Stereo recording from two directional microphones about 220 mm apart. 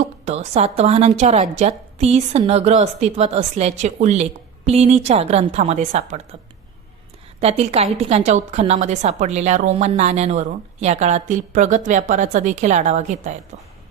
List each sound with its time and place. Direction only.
0.0 s a woman's voice: 30° right (ahead or behind)
7.4 s a woman's voice: 30° right (ahead or behind)